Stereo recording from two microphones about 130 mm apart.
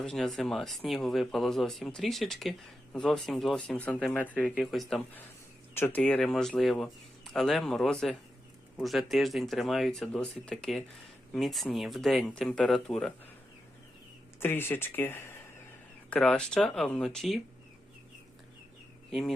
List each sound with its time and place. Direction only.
0.0 s speech: 5° left (ahead or behind)
5.7 s speech: 15° left (ahead or behind)
14.3 s speech: 15° left (ahead or behind)
16.0 s speech: 5° left (ahead or behind)